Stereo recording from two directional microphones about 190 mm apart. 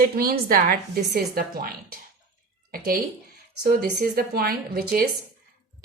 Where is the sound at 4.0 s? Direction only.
50° right (ahead or behind).